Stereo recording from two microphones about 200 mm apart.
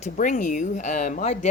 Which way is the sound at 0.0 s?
40° left (ahead or behind).